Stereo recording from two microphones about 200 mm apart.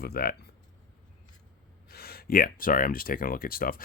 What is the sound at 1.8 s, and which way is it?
Speech, 50° left (ahead or behind).